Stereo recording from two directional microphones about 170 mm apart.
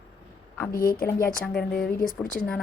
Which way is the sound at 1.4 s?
5° left (ahead or behind).